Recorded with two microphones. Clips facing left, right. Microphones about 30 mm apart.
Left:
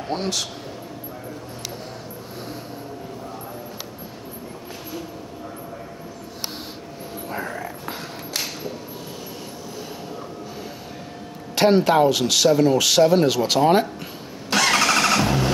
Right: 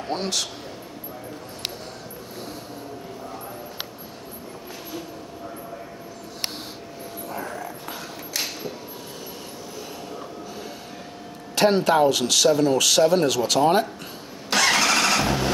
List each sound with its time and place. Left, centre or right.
0.1 s a man's voice: centre
7.4 s a sound: left
11.5 s speech: centre
14.5 s vehicle: centre